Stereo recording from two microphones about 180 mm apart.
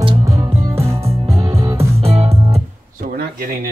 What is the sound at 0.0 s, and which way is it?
Music, 20° right (ahead or behind).